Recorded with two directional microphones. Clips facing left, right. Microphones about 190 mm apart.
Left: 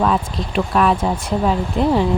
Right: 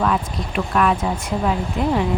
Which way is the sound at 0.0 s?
30° left (ahead or behind).